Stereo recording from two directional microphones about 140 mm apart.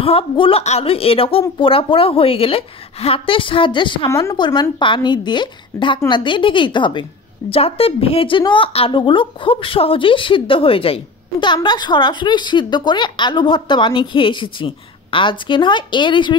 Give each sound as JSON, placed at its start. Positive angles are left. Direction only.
{"t": 0.0, "sound": "a woman's voice", "side_deg": 40}
{"t": 4.1, "sound": "a woman's voice", "side_deg": 20}
{"t": 4.4, "sound": "a woman's voice", "side_deg": 35}